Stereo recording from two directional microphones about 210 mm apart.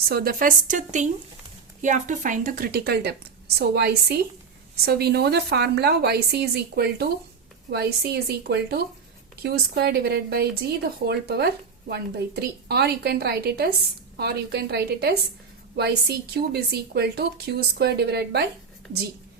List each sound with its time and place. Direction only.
0.1 s a woman's voice: 45° right (ahead or behind)